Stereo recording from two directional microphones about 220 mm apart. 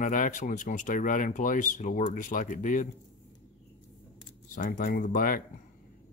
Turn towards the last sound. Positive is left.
turn(degrees=40)  # may be behind; listen again after turning